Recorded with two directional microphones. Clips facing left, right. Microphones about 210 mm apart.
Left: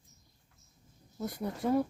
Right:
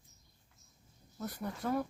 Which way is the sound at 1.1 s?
20° left (ahead or behind).